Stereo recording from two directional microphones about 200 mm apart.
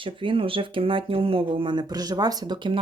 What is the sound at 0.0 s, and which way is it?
Speech, 25° right (ahead or behind).